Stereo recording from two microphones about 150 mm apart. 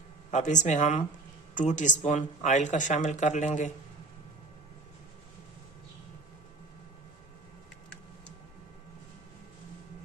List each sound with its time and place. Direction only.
0.3 s speech: 55° left (ahead or behind)